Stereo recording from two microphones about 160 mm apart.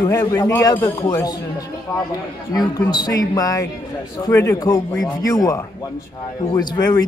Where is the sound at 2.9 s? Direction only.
25° left (ahead or behind).